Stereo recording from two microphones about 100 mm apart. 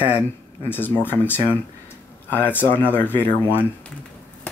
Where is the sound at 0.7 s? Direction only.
20° left (ahead or behind).